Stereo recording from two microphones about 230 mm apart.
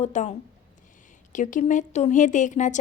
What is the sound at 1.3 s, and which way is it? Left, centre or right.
A woman's voice, left.